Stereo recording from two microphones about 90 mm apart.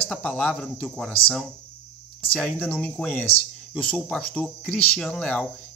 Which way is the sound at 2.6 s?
20° left (ahead or behind).